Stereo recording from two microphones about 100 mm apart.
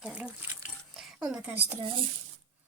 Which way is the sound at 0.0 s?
15° right (ahead or behind).